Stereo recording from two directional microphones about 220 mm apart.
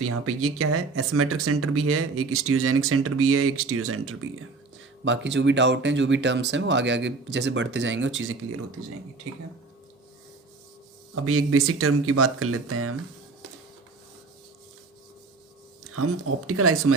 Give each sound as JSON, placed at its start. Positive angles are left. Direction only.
{"t": 0.0, "sound": "speech", "side_deg": -90}
{"t": 5.0, "sound": "speech", "side_deg": -55}
{"t": 11.1, "sound": "speech", "side_deg": -80}
{"t": 15.9, "sound": "speech", "side_deg": -85}